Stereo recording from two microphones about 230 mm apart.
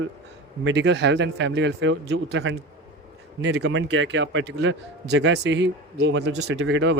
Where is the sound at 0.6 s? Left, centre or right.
Right.